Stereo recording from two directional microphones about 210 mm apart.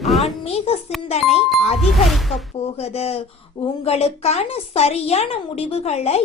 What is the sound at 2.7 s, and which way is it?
A woman's voice, 30° left (ahead or behind).